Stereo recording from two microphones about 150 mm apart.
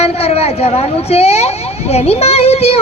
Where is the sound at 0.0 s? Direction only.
45° left (ahead or behind).